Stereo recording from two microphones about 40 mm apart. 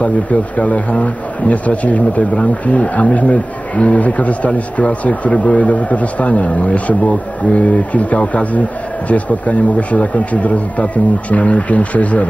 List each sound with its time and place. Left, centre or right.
0.0 s speech: left